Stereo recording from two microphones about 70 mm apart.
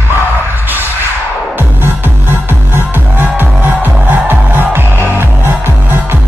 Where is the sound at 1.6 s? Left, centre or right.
Right.